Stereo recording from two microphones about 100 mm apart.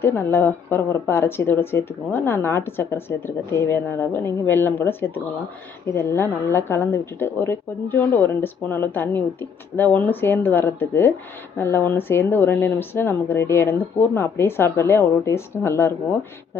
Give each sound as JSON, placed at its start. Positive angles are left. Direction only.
{"t": 0.0, "sound": "speech", "side_deg": 25}